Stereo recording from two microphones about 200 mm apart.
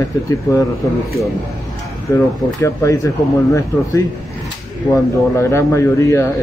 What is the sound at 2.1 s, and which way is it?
Speech, 15° left (ahead or behind).